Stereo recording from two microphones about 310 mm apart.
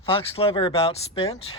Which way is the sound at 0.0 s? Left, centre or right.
Centre.